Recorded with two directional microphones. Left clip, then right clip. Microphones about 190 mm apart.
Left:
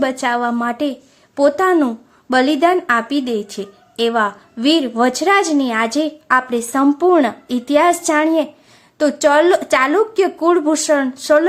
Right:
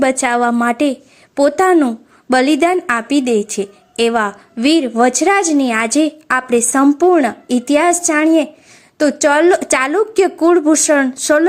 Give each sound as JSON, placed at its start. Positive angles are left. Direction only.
{"t": 0.0, "sound": "a woman's voice", "side_deg": -15}
{"t": 2.3, "sound": "a woman's voice", "side_deg": -20}